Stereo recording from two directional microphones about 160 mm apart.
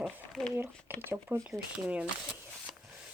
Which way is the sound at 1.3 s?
15° right (ahead or behind).